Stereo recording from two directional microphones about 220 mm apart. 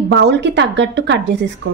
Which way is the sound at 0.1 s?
55° right (ahead or behind).